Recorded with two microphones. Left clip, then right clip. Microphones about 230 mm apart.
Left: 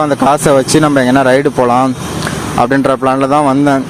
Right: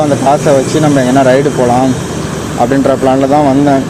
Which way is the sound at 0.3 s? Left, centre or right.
Left.